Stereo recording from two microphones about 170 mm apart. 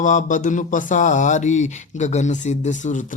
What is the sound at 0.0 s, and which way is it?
Speech, 50° left (ahead or behind).